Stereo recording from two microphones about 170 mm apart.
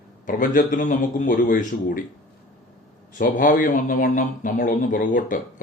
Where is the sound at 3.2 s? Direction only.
55° left (ahead or behind).